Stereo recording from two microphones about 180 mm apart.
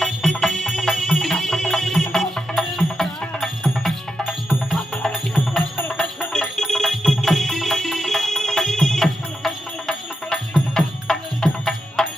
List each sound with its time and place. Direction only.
0.0 s music: centre (ahead or behind)